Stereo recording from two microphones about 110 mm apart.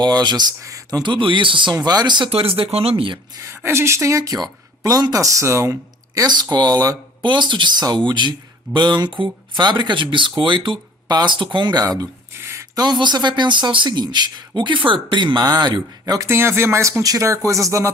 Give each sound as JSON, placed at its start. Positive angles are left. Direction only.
{"t": 0.0, "sound": "speech", "side_deg": -40}
{"t": 1.7, "sound": "speech", "side_deg": -40}
{"t": 2.3, "sound": "speech", "side_deg": -60}
{"t": 3.3, "sound": "speech", "side_deg": -25}
{"t": 7.2, "sound": "speech", "side_deg": -45}
{"t": 16.2, "sound": "speech", "side_deg": -20}